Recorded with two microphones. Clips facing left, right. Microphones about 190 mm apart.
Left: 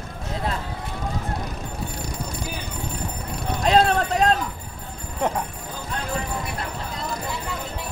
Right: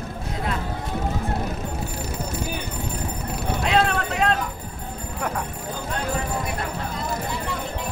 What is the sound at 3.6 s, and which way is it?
Vehicle, 35° left (ahead or behind).